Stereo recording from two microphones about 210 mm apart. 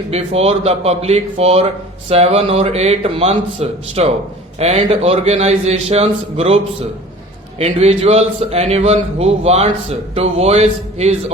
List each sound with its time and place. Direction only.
0.1 s a man's voice: 30° right (ahead or behind)
7.6 s speech: 30° right (ahead or behind)